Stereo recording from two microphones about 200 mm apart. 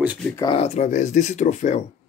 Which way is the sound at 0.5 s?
35° left (ahead or behind).